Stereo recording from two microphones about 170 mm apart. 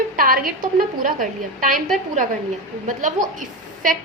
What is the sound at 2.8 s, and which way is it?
A woman's voice, 50° right (ahead or behind).